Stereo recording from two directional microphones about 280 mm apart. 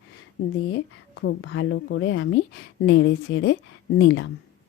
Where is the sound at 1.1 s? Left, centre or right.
Left.